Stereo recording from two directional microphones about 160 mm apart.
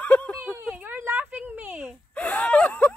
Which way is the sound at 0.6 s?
10° right (ahead or behind).